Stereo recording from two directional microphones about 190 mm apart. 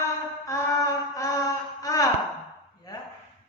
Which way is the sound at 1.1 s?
15° left (ahead or behind).